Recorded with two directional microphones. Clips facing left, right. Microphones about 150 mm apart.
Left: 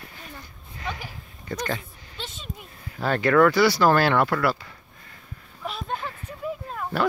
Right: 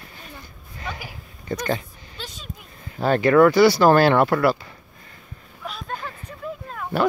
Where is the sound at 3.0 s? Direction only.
20° right (ahead or behind).